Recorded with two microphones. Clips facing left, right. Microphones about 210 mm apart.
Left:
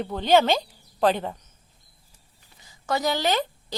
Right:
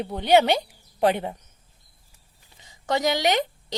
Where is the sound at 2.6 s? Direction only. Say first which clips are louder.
Right 2 dB; 20° right (ahead or behind).